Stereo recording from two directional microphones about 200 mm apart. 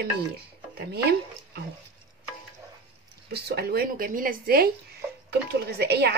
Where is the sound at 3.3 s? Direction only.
55° right (ahead or behind).